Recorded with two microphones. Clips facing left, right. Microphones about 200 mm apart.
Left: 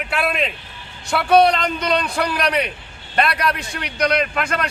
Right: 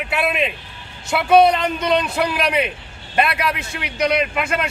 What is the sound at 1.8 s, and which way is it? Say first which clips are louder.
Speech: right 3 dB; 20° right (ahead or behind).